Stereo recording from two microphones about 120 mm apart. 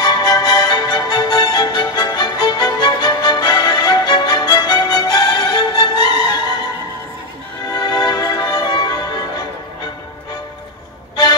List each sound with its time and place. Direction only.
0.0 s music: 35° left (ahead or behind)
7.7 s music: 35° left (ahead or behind)